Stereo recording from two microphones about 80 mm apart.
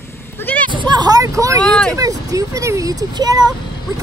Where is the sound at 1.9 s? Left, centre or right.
Right.